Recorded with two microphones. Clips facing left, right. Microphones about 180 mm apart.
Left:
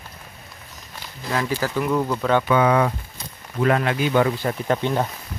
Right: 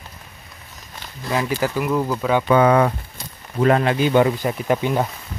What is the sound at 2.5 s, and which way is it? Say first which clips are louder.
Speech: right 5 dB; 45° right (ahead or behind).